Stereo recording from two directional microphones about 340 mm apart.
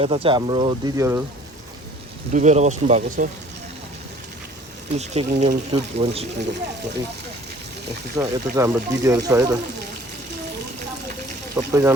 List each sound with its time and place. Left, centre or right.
0.0 s speech: centre
2.3 s speech: right
4.9 s speech: centre
6.4 s speech: right
8.1 s speech: centre
11.5 s speech: centre